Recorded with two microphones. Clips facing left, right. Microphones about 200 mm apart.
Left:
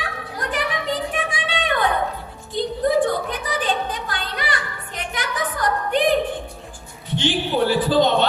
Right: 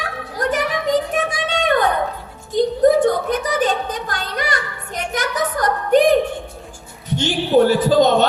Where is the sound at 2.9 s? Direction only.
45° right (ahead or behind).